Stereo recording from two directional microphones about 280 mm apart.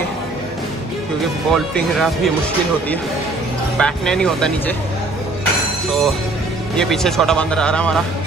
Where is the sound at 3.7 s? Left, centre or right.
Centre.